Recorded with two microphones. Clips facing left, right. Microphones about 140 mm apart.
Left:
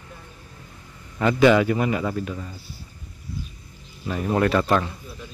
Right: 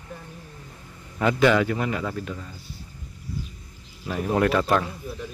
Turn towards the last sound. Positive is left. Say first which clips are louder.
# left 1 dB
turn(degrees=0)  # may be behind; listen again after turning